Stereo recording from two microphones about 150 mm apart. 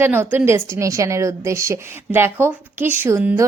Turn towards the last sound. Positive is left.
turn(degrees=-15)  # may be behind; listen again after turning